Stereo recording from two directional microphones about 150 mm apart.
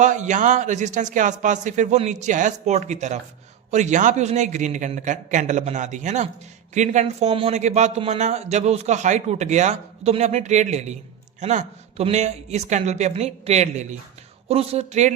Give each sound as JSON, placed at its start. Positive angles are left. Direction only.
{"t": 0.0, "sound": "a man's voice", "side_deg": -55}